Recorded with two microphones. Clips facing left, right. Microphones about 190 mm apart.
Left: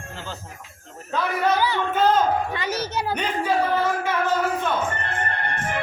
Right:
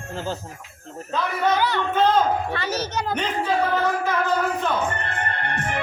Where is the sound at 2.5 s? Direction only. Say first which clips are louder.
Even; 15° left (ahead or behind).